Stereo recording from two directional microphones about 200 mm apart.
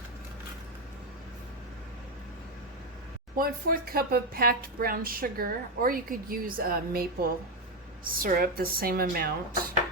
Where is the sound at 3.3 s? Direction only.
45° right (ahead or behind).